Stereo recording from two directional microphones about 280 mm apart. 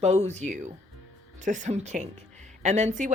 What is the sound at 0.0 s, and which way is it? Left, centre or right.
Speech, right.